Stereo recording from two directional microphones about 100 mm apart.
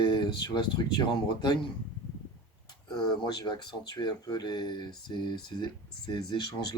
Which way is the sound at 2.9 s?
50° left (ahead or behind).